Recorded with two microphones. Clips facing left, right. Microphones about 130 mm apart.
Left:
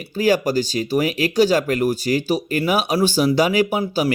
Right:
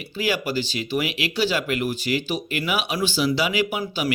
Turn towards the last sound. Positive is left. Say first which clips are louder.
# left 6 dB
turn(degrees=35)  # may be behind; listen again after turning